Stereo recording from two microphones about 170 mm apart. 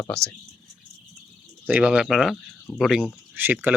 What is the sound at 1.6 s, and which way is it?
Speech, 5° right (ahead or behind).